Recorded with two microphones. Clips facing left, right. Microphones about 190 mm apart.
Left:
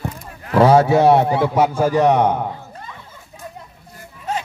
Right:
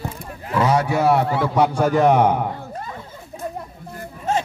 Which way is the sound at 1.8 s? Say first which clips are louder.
Even; centre (ahead or behind).